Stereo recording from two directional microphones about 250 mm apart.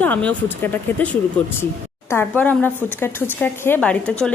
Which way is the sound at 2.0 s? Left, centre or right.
Centre.